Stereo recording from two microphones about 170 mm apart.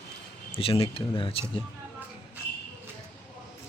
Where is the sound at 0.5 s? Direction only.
35° left (ahead or behind).